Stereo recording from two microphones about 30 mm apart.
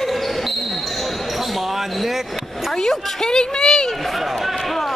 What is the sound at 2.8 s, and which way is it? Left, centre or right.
A woman's voice, centre.